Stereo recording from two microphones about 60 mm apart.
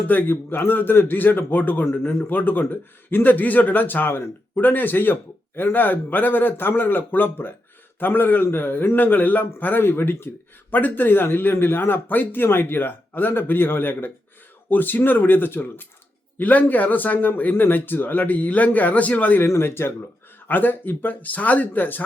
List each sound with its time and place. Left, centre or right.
0.1 s a man's voice: left
2.3 s a man's voice: left
19.4 s a man's voice: left